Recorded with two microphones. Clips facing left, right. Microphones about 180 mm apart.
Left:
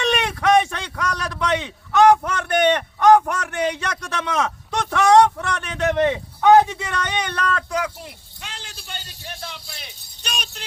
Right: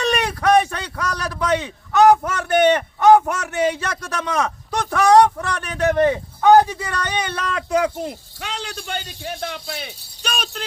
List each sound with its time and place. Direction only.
0.0 s speech: centre (ahead or behind)
7.7 s speech: 25° right (ahead or behind)
8.4 s a man's voice: 65° right (ahead or behind)